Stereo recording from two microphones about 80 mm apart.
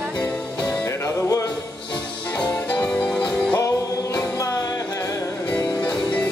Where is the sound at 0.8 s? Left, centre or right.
Left.